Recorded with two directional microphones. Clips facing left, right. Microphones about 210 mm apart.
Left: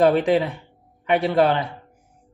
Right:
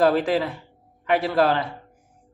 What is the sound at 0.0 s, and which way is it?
Speech, 20° left (ahead or behind).